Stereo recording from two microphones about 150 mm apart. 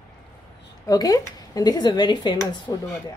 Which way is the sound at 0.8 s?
25° left (ahead or behind).